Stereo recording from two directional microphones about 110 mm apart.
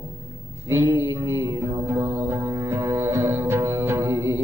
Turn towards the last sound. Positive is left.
turn(degrees=-25)  # may be behind; listen again after turning